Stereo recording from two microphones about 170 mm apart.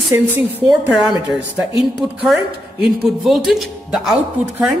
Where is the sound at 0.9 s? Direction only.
5° right (ahead or behind).